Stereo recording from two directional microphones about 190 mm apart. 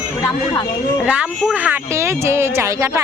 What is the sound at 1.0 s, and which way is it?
A woman's voice, 5° right (ahead or behind).